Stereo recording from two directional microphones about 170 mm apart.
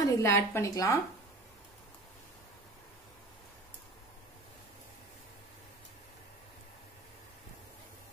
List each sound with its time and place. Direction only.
0.0 s a woman's voice: 15° left (ahead or behind)